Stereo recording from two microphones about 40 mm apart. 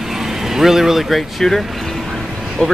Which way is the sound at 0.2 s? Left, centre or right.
Centre.